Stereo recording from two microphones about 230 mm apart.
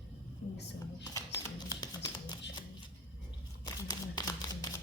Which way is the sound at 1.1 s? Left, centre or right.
Centre.